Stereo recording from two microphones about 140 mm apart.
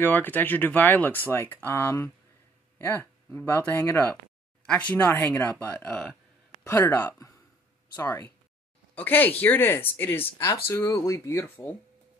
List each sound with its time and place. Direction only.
0.0 s speech: 15° left (ahead or behind)